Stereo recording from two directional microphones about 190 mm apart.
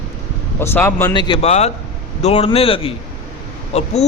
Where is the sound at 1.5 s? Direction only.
35° left (ahead or behind).